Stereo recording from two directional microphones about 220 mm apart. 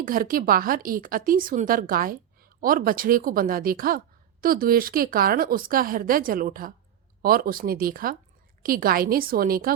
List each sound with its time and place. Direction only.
0.0 s speech: 40° right (ahead or behind)